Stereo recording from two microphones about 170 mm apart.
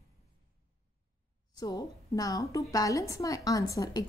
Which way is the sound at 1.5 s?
20° left (ahead or behind).